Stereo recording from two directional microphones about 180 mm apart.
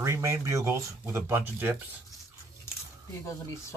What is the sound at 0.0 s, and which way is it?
Speech, 15° right (ahead or behind).